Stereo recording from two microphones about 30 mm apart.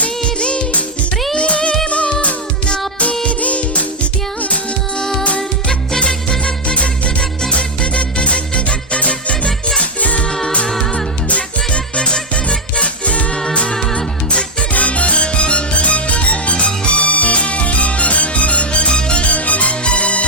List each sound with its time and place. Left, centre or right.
0.2 s music: left
1.4 s music: left
3.2 s music: left
4.9 s music: centre
6.7 s music: left
9.3 s music: left
10.0 s music: left
11.3 s music: left
11.9 s music: left
13.3 s music: left
14.7 s music: left
19.2 s music: left